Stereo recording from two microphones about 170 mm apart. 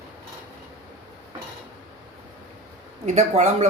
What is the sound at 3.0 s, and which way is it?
Speech, 45° right (ahead or behind).